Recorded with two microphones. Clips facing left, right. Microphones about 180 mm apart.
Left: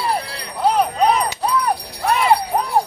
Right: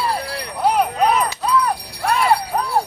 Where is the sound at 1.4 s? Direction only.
25° left (ahead or behind).